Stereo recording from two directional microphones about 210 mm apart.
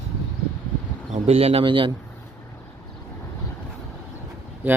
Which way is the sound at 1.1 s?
30° right (ahead or behind).